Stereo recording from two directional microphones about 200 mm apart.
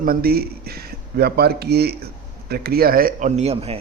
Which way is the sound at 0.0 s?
50° right (ahead or behind).